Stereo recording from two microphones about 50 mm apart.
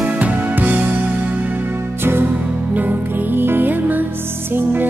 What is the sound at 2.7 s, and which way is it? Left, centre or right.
Music, right.